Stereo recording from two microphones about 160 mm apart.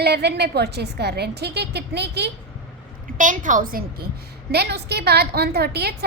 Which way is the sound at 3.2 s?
55° right (ahead or behind).